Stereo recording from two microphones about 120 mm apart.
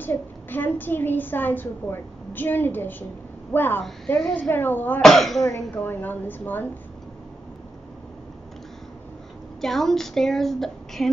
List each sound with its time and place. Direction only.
0.0 s a woman's voice: 15° left (ahead or behind)
5.0 s speech: centre (ahead or behind)
5.5 s a woman's voice: 15° left (ahead or behind)
9.6 s speech: 5° left (ahead or behind)